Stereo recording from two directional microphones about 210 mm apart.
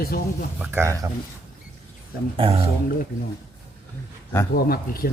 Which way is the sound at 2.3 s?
25° right (ahead or behind).